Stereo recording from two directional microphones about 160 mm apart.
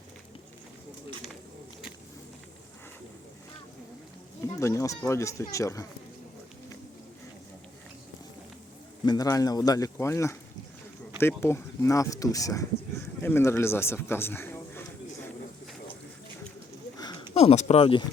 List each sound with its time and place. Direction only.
4.6 s speech: 20° left (ahead or behind)
9.0 s speech: 25° left (ahead or behind)
17.0 s a sound: 25° left (ahead or behind)
17.3 s speech: 40° left (ahead or behind)